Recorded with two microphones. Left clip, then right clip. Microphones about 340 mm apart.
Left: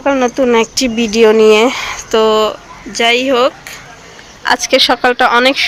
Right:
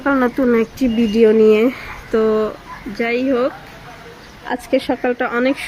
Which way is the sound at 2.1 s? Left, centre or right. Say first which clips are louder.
Left 6 dB; left.